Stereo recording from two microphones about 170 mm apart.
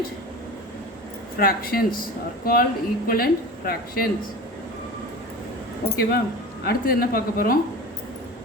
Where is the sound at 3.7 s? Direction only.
60° left (ahead or behind).